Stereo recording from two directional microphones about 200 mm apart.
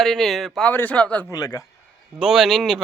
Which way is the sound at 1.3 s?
20° left (ahead or behind).